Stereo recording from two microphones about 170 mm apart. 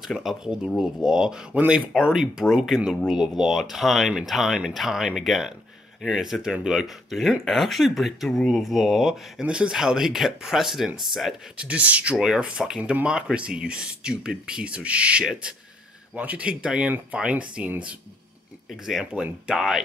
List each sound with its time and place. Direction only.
0.0 s speech: centre (ahead or behind)